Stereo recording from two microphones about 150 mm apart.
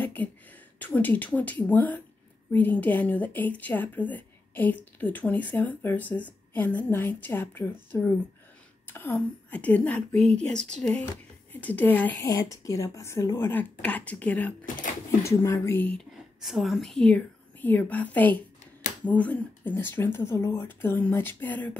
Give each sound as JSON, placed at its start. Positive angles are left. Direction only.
{"t": 0.0, "sound": "a woman's voice", "side_deg": 10}
{"t": 12.3, "sound": "a woman's voice", "side_deg": 25}
{"t": 16.0, "sound": "speech", "side_deg": 0}
{"t": 18.6, "sound": "a sound", "side_deg": 50}
{"t": 19.0, "sound": "a woman's voice", "side_deg": 10}